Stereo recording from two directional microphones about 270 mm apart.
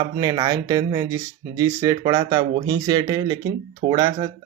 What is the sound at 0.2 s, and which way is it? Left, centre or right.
Speech, centre.